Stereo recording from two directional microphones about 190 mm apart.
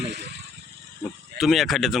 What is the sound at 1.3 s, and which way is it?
Speech, centre (ahead or behind).